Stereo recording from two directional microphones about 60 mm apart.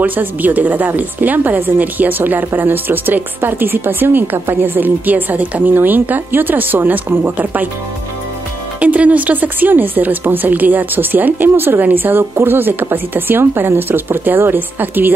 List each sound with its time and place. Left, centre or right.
0.0 s speech: right
8.7 s speech: right